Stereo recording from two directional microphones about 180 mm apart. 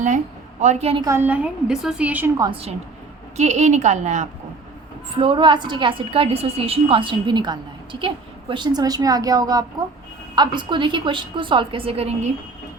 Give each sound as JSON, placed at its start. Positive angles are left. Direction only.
{"t": 0.6, "sound": "a woman's voice", "side_deg": -40}
{"t": 1.0, "sound": "a woman's voice", "side_deg": -15}
{"t": 2.4, "sound": "a woman's voice", "side_deg": -30}
{"t": 5.1, "sound": "a woman's voice", "side_deg": -30}